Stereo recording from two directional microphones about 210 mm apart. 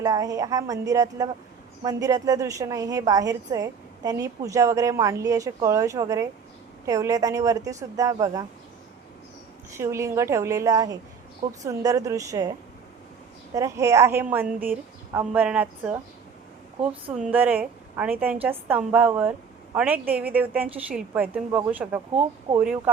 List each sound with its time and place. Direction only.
0.0 s a woman's voice: 15° right (ahead or behind)
9.7 s a woman's voice: 15° right (ahead or behind)
17.2 s a woman's voice: 5° right (ahead or behind)